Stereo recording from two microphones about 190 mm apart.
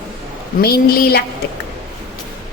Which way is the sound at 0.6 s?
55° left (ahead or behind).